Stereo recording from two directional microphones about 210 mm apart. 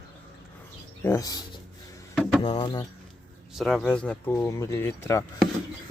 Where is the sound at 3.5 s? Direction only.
Centre (ahead or behind).